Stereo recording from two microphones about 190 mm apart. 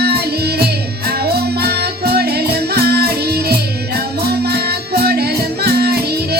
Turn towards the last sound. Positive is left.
turn(degrees=-55)  # may be behind; listen again after turning